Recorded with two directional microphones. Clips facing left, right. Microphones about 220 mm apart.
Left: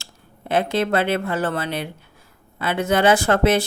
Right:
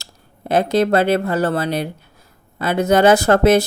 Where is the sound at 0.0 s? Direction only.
40° right (ahead or behind).